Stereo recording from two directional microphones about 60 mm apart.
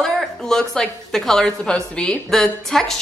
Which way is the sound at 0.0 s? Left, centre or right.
Centre.